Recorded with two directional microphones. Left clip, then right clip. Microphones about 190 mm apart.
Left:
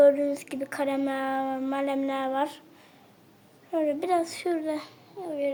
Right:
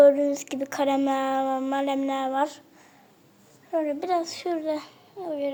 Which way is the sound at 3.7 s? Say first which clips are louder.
Even; 5° left (ahead or behind).